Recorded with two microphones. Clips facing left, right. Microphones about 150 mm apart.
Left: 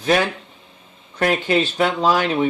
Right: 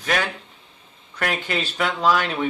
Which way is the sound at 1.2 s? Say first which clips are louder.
Left 7 dB; 35° left (ahead or behind).